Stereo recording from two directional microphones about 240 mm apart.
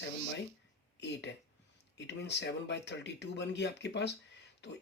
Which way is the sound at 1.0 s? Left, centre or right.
Left.